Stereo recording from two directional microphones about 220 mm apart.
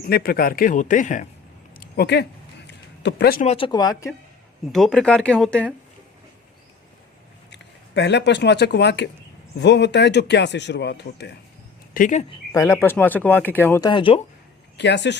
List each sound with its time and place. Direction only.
0.1 s a man's voice: 45° left (ahead or behind)
1.8 s a sound: 45° left (ahead or behind)
3.4 s speech: 25° left (ahead or behind)
4.7 s speech: centre (ahead or behind)
7.5 s speech: 55° left (ahead or behind)
11.9 s a man's voice: 35° left (ahead or behind)
12.3 s speech: 15° left (ahead or behind)
14.8 s speech: 50° left (ahead or behind)